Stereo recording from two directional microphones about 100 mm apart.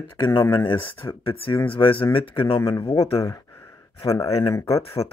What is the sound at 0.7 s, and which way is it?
Speech, 60° left (ahead or behind).